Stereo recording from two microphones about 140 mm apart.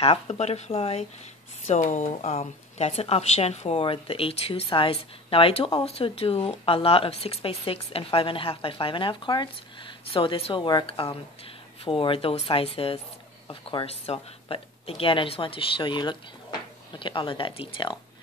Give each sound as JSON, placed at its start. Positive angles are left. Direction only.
{"t": 0.0, "sound": "a woman's voice", "side_deg": 45}
{"t": 1.7, "sound": "a woman's voice", "side_deg": 60}